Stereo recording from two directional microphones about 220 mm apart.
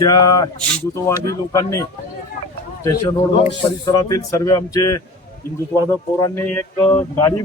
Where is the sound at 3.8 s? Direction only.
15° left (ahead or behind).